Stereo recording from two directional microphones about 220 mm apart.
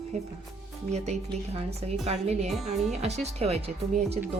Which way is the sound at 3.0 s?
30° right (ahead or behind).